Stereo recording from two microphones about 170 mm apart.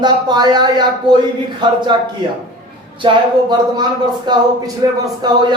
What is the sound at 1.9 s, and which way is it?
Speech, 30° right (ahead or behind).